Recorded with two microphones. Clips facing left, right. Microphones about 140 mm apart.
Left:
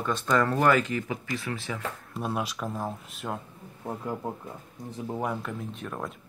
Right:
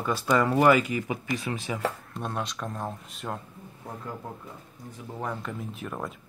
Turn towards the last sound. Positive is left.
turn(degrees=0)  # may be behind; listen again after turning